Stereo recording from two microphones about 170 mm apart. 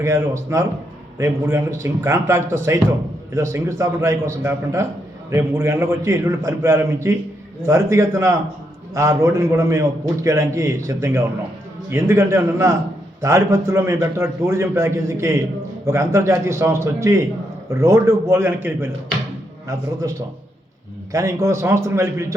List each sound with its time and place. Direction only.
0.0 s a man's voice: 15° right (ahead or behind)